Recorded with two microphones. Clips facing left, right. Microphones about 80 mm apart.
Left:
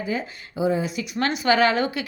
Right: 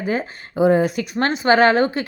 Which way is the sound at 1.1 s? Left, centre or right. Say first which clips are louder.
Right 4 dB; right.